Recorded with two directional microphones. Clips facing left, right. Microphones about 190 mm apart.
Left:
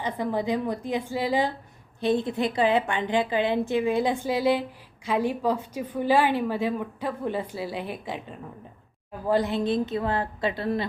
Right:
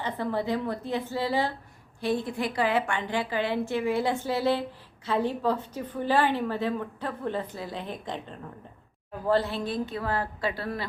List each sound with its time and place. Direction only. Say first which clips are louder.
0.0 s a woman's voice: left 2 dB; 15° left (ahead or behind)